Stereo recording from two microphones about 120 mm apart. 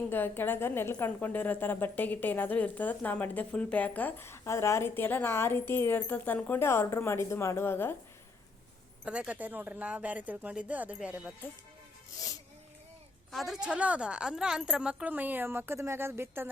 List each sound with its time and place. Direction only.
0.1 s a woman's voice: 15° left (ahead or behind)
9.0 s a woman's voice: 10° right (ahead or behind)
13.3 s a woman's voice: centre (ahead or behind); by 16.5 s 20° right (ahead or behind)